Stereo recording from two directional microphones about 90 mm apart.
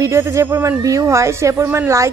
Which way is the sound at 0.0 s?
35° right (ahead or behind).